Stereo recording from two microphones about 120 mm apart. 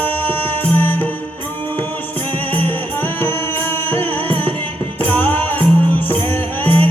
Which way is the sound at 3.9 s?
15° left (ahead or behind).